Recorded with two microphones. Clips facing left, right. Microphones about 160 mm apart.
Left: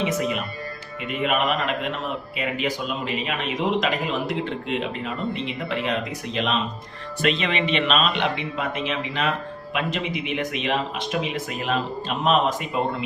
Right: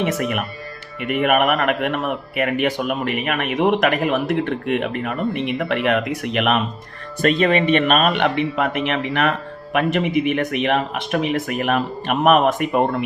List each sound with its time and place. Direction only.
0.0 s speech: 60° right (ahead or behind)
7.2 s speech: 45° right (ahead or behind)